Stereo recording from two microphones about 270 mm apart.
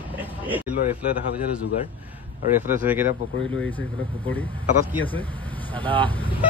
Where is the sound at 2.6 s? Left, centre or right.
Centre.